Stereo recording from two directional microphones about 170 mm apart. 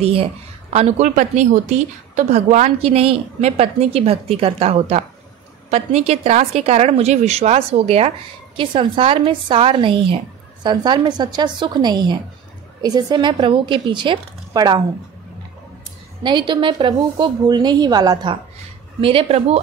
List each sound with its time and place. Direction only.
0.0 s a woman's voice: 35° right (ahead or behind)
16.2 s a woman's voice: 25° right (ahead or behind)